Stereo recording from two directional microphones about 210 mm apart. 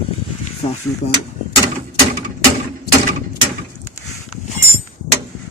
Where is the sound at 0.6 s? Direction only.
25° left (ahead or behind).